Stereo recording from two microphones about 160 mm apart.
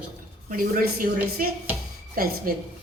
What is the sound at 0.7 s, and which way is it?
A woman's voice, 65° right (ahead or behind).